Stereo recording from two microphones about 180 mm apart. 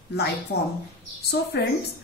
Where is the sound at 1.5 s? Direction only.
70° left (ahead or behind).